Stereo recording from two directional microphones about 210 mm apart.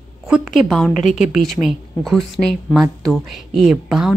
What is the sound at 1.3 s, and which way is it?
A woman's voice, centre (ahead or behind).